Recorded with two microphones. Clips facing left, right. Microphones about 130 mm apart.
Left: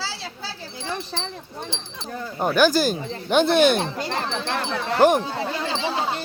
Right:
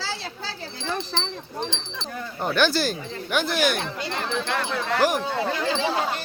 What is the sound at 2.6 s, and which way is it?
Speech, 15° left (ahead or behind).